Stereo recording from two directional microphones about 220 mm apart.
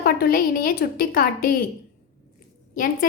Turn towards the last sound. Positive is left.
turn(degrees=40)  # may be behind; listen again after turning